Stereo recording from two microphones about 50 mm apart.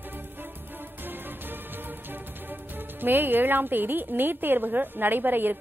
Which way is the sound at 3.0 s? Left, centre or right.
Right.